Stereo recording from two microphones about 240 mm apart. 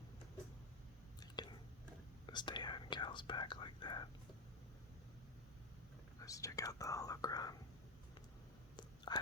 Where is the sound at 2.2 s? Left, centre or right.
Centre.